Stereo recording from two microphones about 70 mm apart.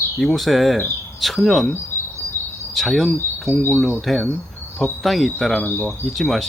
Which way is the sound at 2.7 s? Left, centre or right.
Centre.